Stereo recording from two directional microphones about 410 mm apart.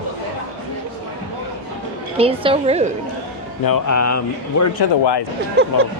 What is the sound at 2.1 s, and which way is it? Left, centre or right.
Speech, centre.